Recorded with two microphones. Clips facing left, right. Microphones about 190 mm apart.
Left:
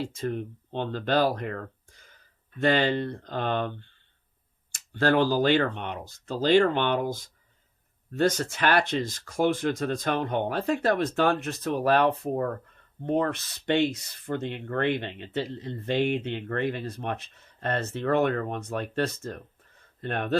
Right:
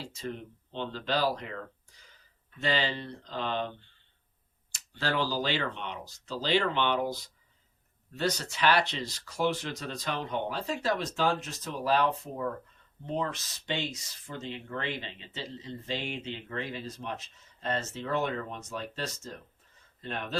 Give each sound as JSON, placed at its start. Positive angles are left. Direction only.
{"t": 0.0, "sound": "speech", "side_deg": 50}